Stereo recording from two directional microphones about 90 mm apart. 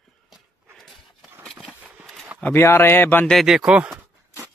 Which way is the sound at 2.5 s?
25° left (ahead or behind).